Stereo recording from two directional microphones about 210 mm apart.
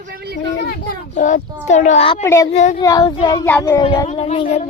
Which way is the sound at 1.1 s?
35° left (ahead or behind).